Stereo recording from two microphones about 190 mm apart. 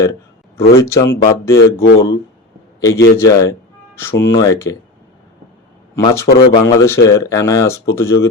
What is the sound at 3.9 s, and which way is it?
Speech, 15° left (ahead or behind).